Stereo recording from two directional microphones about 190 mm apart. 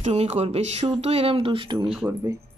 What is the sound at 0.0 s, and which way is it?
Speech, 35° right (ahead or behind).